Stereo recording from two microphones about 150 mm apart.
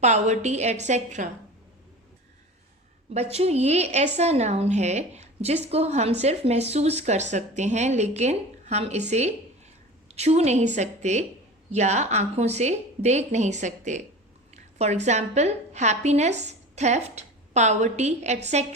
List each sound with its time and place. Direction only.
0.0 s a woman's voice: 50° right (ahead or behind)
3.1 s a woman's voice: 45° right (ahead or behind)